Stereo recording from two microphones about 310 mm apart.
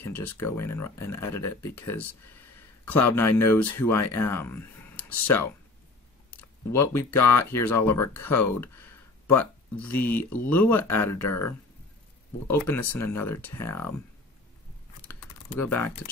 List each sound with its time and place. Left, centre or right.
0.0 s speech: centre
6.3 s a sound: centre
7.6 s speech: centre
11.1 s speech: left
12.4 s speech: centre
15.0 s typing: centre